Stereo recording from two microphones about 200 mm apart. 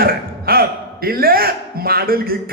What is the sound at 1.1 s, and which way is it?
A man's voice, 50° right (ahead or behind).